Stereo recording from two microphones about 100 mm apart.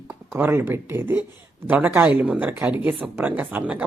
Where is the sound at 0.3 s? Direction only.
20° right (ahead or behind).